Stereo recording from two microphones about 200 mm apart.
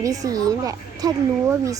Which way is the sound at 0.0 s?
15° right (ahead or behind).